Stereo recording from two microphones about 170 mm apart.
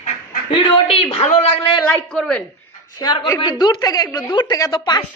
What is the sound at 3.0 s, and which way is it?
A woman's voice, 25° left (ahead or behind).